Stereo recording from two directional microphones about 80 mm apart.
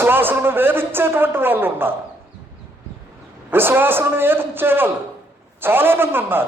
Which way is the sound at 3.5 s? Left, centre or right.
Right.